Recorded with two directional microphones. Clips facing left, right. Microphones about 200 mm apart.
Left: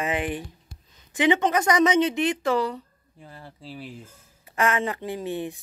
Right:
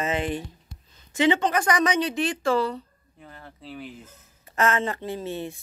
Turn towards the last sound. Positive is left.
turn(degrees=15)  # may be behind; listen again after turning